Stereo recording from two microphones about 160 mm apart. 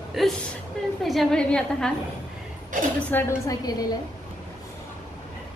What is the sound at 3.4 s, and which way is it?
Speech, 25° left (ahead or behind).